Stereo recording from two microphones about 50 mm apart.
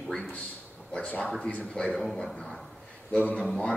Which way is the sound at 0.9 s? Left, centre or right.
Left.